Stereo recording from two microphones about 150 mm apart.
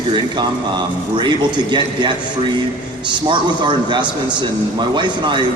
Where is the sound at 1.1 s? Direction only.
30° right (ahead or behind).